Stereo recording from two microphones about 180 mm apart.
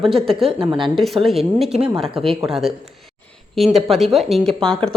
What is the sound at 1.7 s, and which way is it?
Speech, 35° right (ahead or behind).